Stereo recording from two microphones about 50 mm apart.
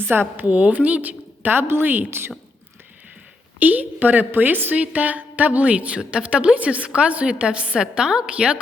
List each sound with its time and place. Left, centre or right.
0.1 s a woman's voice: right
3.6 s a woman's voice: right; by 8.5 s centre